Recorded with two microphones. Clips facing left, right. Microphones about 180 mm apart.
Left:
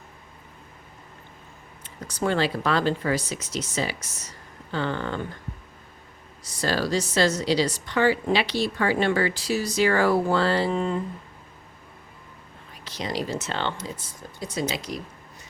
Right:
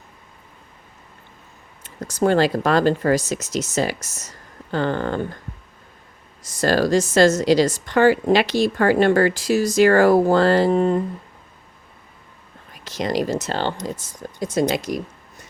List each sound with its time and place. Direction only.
1.8 s speech: 45° right (ahead or behind)
6.5 s speech: 45° right (ahead or behind)
12.8 s speech: 45° right (ahead or behind)